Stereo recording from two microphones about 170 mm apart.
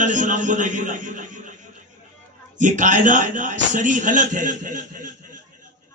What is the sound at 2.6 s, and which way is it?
A man's voice, 50° right (ahead or behind).